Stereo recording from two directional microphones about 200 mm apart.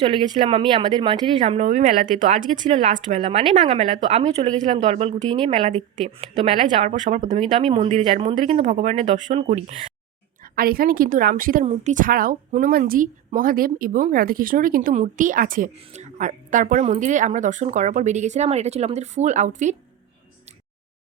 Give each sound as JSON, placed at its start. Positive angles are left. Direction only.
{"t": 0.3, "sound": "speech", "side_deg": -25}
{"t": 1.4, "sound": "a woman's voice", "side_deg": -35}
{"t": 10.4, "sound": "a woman's voice", "side_deg": -45}
{"t": 11.6, "sound": "a woman's voice", "side_deg": -35}